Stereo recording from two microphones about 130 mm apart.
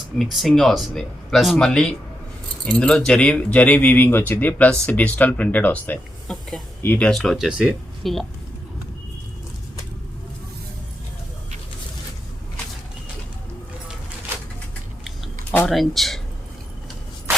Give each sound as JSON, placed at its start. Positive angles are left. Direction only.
{"t": 0.2, "sound": "speech", "side_deg": 0}
{"t": 7.1, "sound": "speech", "side_deg": 0}
{"t": 15.7, "sound": "speech", "side_deg": 0}